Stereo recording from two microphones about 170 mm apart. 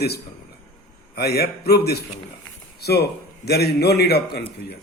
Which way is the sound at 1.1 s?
70° left (ahead or behind).